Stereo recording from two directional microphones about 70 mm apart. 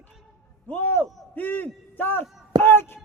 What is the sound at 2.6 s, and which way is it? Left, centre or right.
Speech, left.